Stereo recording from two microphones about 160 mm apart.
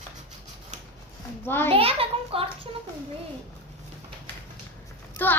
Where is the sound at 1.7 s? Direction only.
35° right (ahead or behind).